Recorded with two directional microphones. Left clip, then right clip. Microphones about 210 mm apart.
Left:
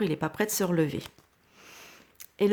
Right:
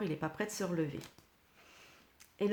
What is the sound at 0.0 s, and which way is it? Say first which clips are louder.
Speech: left 9 dB; 35° left (ahead or behind).